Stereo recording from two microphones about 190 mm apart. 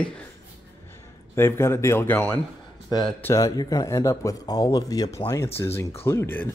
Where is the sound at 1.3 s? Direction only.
10° left (ahead or behind).